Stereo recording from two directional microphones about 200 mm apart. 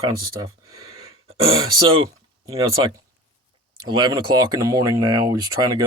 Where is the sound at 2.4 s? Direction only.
20° right (ahead or behind).